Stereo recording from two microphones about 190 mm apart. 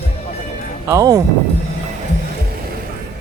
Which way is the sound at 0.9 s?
15° right (ahead or behind).